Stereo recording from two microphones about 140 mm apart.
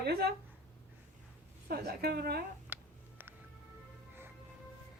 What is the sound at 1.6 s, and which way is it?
Speech, 90° right.